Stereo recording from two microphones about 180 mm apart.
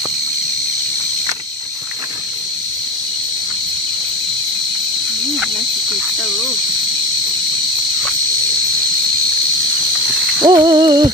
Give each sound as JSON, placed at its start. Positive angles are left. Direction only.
{"t": 10.4, "sound": "hoot", "side_deg": -25}